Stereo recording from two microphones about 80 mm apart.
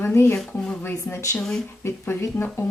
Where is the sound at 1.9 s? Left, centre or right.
Left.